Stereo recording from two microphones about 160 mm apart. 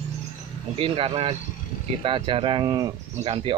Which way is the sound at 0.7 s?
35° right (ahead or behind).